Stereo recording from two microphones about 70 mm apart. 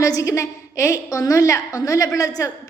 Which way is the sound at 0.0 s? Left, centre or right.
Left.